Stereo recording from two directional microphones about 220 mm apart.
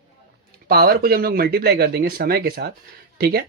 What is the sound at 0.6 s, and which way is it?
Speech, 45° right (ahead or behind).